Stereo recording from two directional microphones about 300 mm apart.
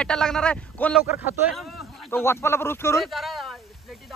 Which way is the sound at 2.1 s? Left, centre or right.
Centre.